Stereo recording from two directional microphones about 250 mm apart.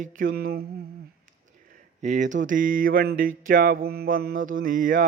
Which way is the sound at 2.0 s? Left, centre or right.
Right.